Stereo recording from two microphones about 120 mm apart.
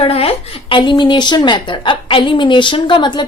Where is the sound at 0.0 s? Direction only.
55° left (ahead or behind).